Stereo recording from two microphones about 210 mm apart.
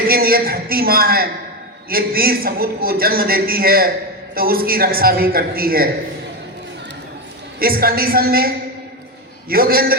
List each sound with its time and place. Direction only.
0.1 s a man's voice: 45° right (ahead or behind)
7.6 s a man's voice: 45° right (ahead or behind)
9.5 s a man's voice: 45° right (ahead or behind)